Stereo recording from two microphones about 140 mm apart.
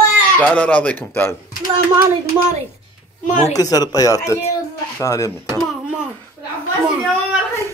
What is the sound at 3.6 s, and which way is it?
Speech, 25° left (ahead or behind).